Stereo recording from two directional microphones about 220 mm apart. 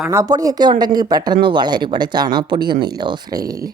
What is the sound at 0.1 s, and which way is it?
Speech, 15° right (ahead or behind).